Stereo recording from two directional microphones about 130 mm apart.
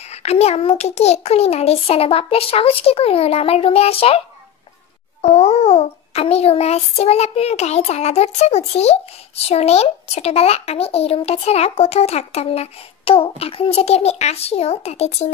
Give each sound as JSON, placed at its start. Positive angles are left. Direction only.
{"t": 0.1, "sound": "speech", "side_deg": 55}
{"t": 5.2, "sound": "a sound", "side_deg": 55}
{"t": 9.5, "sound": "speech", "side_deg": 55}